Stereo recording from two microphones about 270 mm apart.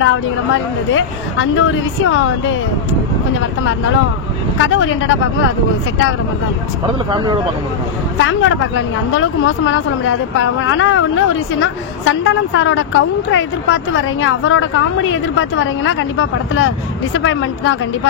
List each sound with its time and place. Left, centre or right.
0.9 s speech: left
4.6 s speech: left
7.1 s speech: centre
8.2 s speech: left